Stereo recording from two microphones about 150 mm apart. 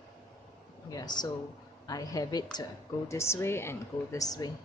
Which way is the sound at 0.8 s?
25° left (ahead or behind).